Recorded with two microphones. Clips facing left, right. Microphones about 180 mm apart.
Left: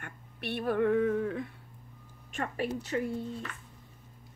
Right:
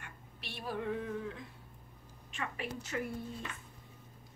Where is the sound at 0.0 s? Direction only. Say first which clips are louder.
Left 10 dB; 55° left (ahead or behind).